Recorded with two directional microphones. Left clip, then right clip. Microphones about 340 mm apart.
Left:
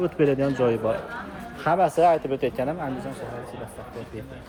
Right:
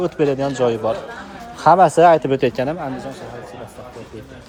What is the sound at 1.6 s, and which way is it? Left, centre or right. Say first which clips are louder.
Speech: right 9 dB; right.